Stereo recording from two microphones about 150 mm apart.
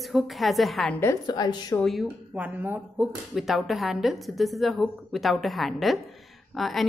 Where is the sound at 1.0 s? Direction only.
25° left (ahead or behind).